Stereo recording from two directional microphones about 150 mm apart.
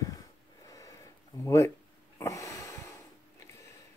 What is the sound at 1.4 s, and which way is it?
Speech, 15° left (ahead or behind).